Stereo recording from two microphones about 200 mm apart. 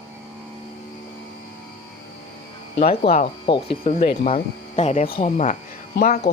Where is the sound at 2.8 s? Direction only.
30° left (ahead or behind).